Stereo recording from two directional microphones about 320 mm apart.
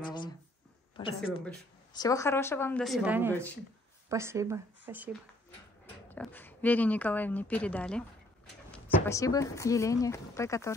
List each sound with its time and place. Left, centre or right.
0.0 s a woman's voice: centre
6.0 s a woman's voice: centre